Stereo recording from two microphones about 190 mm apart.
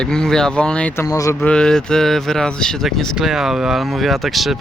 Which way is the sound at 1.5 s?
5° left (ahead or behind).